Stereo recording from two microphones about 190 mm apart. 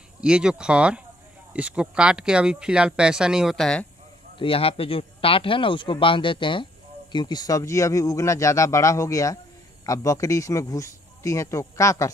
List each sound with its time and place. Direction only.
0.2 s speech: 5° right (ahead or behind)
4.4 s speech: 30° left (ahead or behind)